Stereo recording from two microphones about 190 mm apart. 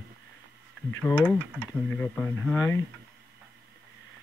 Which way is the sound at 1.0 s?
10° left (ahead or behind).